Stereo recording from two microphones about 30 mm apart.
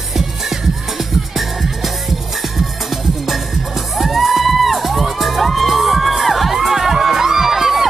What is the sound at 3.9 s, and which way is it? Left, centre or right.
Music, centre.